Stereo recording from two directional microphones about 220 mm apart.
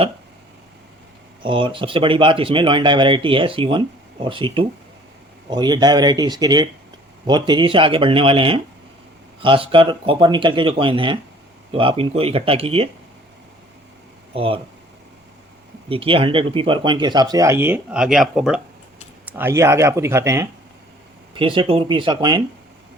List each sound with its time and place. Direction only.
1.4 s speech: 20° right (ahead or behind)
14.3 s speech: 25° right (ahead or behind)
15.9 s speech: 25° right (ahead or behind)